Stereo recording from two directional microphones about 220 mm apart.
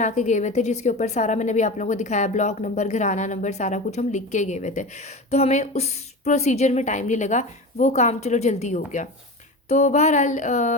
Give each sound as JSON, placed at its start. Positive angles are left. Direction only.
{"t": 0.0, "sound": "a woman's voice", "side_deg": 35}